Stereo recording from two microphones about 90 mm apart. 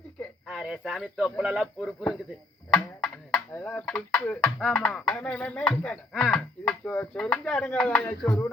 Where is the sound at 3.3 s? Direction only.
25° left (ahead or behind).